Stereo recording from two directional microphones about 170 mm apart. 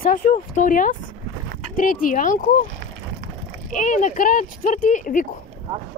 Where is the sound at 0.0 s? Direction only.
55° left (ahead or behind).